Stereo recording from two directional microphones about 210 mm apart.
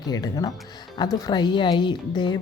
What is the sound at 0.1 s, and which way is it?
A woman's voice, 20° left (ahead or behind).